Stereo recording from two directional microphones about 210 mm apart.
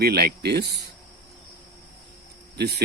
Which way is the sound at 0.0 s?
50° right (ahead or behind).